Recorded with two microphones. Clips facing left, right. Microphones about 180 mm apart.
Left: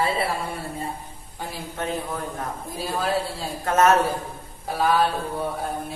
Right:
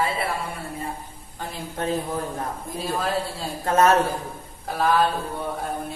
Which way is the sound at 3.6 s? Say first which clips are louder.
Even; 35° right (ahead or behind).